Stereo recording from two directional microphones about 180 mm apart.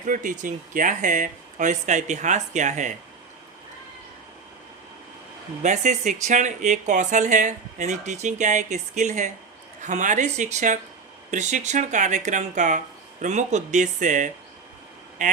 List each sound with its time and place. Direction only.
0.1 s speech: 45° right (ahead or behind)
5.6 s speech: 40° right (ahead or behind)